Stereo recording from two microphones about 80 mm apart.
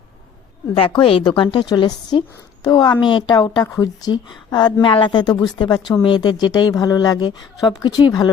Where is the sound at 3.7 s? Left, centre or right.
Left.